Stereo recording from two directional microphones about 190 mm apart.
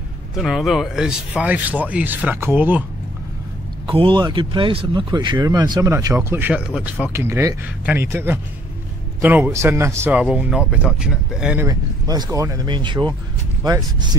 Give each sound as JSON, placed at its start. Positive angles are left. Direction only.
{"t": 0.4, "sound": "speech", "side_deg": 0}
{"t": 3.8, "sound": "speech", "side_deg": -25}
{"t": 11.6, "sound": "speech", "side_deg": -20}